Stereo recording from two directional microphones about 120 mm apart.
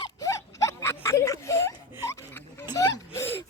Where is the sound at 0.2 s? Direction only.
25° left (ahead or behind).